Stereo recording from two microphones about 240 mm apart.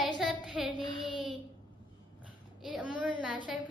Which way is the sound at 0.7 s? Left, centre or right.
Centre.